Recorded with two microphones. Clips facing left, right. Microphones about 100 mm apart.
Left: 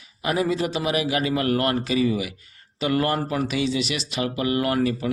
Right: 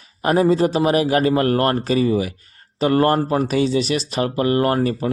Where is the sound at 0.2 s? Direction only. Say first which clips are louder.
Right 7 dB; 40° right (ahead or behind).